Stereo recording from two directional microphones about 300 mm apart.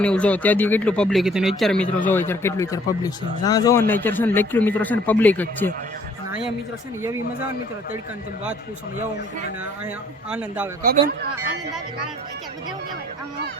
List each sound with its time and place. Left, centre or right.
0.0 s speech: centre
10.2 s speech: centre
10.8 s speech: right